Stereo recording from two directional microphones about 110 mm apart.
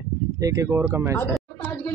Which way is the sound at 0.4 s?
30° right (ahead or behind).